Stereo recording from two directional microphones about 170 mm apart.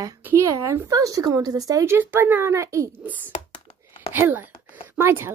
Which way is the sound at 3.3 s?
30° left (ahead or behind).